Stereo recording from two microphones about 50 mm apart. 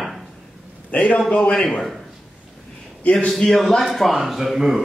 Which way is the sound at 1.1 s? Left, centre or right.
Centre.